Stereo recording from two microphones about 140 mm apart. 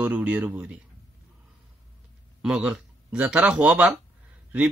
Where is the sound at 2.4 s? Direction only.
5° right (ahead or behind).